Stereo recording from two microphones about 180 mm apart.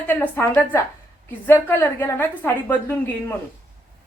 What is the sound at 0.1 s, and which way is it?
Speech, 10° left (ahead or behind).